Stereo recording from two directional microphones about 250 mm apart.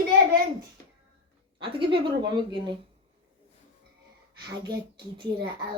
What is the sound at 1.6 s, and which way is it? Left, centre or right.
Speech, centre.